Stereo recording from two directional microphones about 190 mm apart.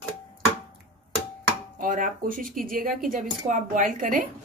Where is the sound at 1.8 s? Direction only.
45° right (ahead or behind).